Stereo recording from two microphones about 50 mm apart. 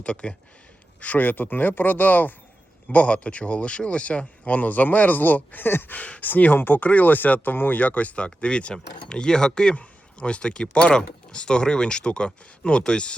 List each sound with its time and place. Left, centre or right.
0.0 s speech: left
1.0 s speech: left
6.0 s speech: left